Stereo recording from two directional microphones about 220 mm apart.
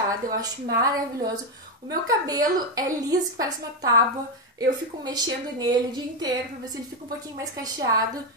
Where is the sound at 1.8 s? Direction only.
15° right (ahead or behind).